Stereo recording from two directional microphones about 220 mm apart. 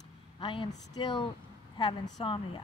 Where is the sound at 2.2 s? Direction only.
25° left (ahead or behind).